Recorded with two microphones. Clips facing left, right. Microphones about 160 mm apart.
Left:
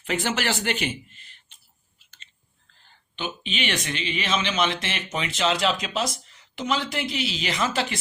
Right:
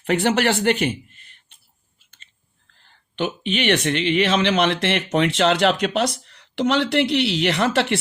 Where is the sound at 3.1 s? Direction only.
65° right (ahead or behind).